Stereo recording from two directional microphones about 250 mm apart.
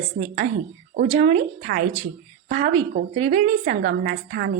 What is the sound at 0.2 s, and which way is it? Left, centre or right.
A woman's voice, right.